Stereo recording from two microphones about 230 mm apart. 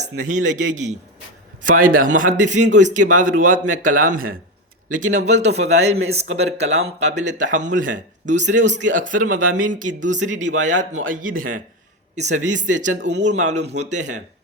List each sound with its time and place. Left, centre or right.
0.0 s a man's voice: right
12.9 s speech: right
13.7 s speech: right